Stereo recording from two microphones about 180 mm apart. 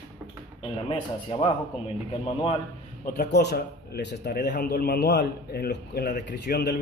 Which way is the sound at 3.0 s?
55° left (ahead or behind).